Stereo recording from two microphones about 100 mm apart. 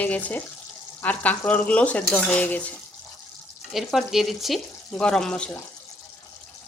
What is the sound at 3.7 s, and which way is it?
Frying, centre (ahead or behind).